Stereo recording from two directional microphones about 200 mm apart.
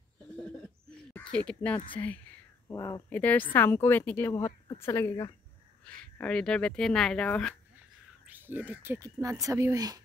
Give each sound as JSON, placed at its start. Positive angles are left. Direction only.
{"t": 0.4, "sound": "a sound", "side_deg": 5}
{"t": 1.1, "sound": "speech", "side_deg": 5}
{"t": 2.7, "sound": "speech", "side_deg": 20}
{"t": 3.1, "sound": "a woman's voice", "side_deg": 10}
{"t": 8.3, "sound": "speech", "side_deg": -10}